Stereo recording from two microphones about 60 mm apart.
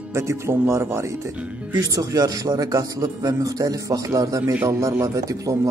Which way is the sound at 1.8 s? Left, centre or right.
Right.